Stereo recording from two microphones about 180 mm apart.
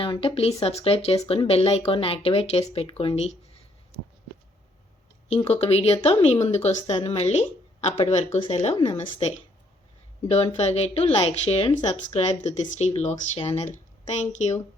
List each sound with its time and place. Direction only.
0.0 s speech: 30° left (ahead or behind)
5.3 s speech: 35° left (ahead or behind)